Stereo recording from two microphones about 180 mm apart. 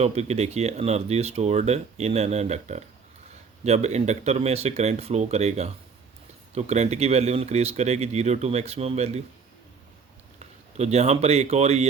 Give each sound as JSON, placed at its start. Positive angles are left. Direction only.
{"t": 0.0, "sound": "speech", "side_deg": -35}
{"t": 10.8, "sound": "speech", "side_deg": -35}